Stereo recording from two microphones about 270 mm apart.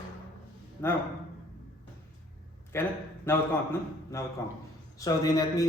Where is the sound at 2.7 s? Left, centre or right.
Centre.